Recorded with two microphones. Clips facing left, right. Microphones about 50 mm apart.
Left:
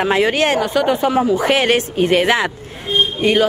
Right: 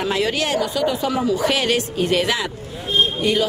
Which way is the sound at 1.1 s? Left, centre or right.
Left.